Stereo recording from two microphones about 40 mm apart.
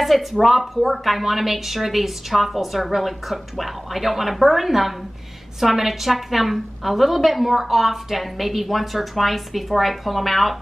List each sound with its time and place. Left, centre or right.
0.0 s a woman's voice: centre